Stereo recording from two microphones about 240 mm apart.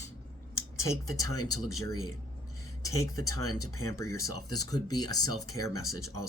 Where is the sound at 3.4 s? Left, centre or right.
Left.